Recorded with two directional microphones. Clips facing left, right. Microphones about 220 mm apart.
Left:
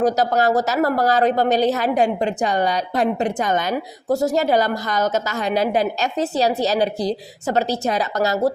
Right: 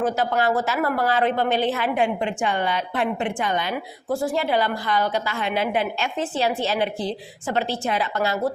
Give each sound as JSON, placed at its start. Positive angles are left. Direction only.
{"t": 0.0, "sound": "a woman's voice", "side_deg": 40}